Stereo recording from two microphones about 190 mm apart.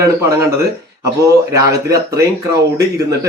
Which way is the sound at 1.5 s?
15° right (ahead or behind).